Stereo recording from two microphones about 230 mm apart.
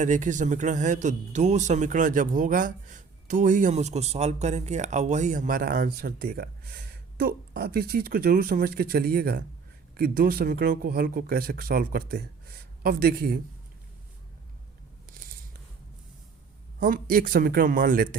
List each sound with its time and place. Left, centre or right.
0.0 s speech: right
16.8 s speech: right